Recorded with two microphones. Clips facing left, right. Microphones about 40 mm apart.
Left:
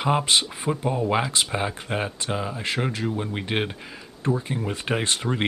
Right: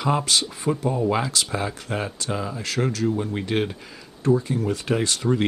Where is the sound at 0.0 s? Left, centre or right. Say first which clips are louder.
Left 1 dB; left.